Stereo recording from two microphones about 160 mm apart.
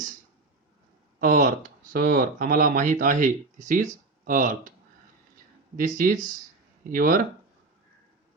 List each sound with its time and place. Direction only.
1.2 s speech: 55° right (ahead or behind)
5.7 s speech: 55° right (ahead or behind)